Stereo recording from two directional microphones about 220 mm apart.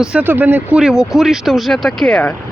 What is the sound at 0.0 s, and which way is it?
Speech, 5° right (ahead or behind).